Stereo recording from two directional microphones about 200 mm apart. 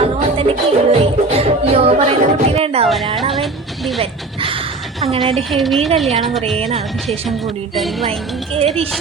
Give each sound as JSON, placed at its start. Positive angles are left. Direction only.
{"t": 0.3, "sound": "music", "side_deg": -30}
{"t": 3.3, "sound": "speech", "side_deg": 0}
{"t": 4.0, "sound": "speech", "side_deg": -25}
{"t": 5.5, "sound": "speech", "side_deg": 0}
{"t": 6.6, "sound": "speech", "side_deg": -30}